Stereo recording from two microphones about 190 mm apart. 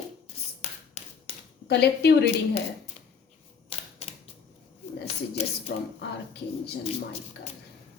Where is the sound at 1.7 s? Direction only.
60° left (ahead or behind).